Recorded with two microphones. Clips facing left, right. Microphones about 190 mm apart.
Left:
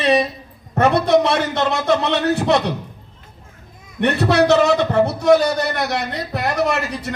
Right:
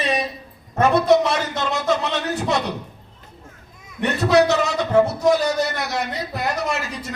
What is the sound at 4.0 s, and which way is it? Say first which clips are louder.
A man's voice: left 1 dB; 65° left (ahead or behind).